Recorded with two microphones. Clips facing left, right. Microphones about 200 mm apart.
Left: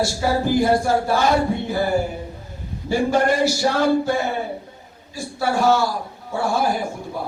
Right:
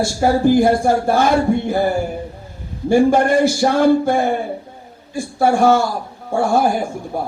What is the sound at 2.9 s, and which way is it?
A man's voice, 50° right (ahead or behind).